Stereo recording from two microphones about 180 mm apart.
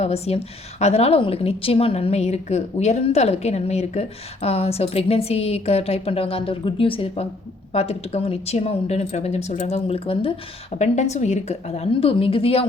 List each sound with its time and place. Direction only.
0.0 s a woman's voice: 35° left (ahead or behind)